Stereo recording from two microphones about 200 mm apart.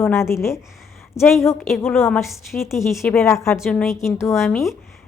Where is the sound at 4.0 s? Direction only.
15° left (ahead or behind).